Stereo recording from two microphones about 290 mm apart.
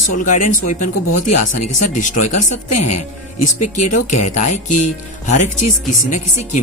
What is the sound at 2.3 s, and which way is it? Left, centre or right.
Speech, left.